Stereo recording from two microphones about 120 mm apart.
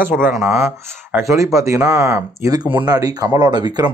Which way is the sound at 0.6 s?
20° right (ahead or behind).